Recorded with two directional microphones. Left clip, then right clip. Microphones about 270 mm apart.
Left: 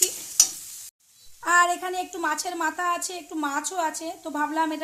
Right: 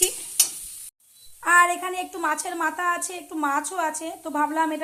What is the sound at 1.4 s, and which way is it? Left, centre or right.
A woman's voice, centre.